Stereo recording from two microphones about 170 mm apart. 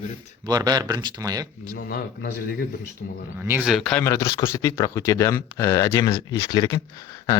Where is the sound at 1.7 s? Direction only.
65° left (ahead or behind).